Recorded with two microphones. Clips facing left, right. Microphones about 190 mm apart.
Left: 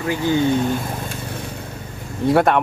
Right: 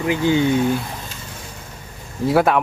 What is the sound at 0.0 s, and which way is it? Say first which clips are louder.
Speech: right 1 dB; 15° right (ahead or behind).